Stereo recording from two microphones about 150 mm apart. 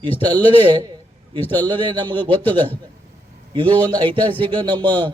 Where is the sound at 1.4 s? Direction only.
10° left (ahead or behind).